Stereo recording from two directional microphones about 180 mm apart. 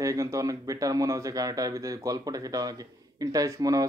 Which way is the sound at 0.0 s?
15° right (ahead or behind).